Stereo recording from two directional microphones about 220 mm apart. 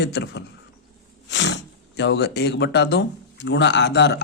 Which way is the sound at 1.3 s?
55° left (ahead or behind).